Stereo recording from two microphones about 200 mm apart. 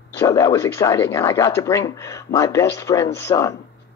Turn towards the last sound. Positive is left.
turn(degrees=15)  # may be behind; listen again after turning